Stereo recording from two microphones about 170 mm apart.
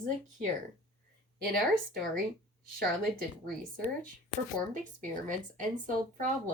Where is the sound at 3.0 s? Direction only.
5° left (ahead or behind).